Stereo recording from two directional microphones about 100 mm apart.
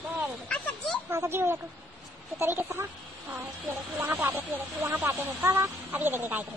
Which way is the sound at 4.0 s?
20° right (ahead or behind).